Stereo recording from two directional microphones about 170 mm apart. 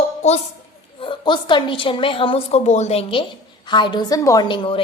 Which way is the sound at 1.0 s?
30° left (ahead or behind).